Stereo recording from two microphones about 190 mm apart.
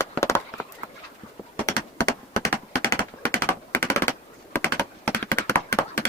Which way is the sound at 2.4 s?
15° left (ahead or behind).